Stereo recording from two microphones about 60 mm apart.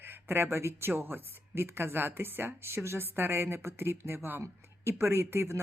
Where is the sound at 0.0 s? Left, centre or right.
Right.